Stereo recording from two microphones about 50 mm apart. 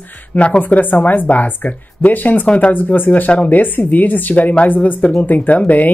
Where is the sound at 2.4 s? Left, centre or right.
Left.